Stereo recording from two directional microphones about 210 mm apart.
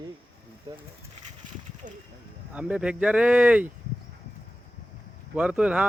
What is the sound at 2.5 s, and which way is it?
Speech, 5° right (ahead or behind).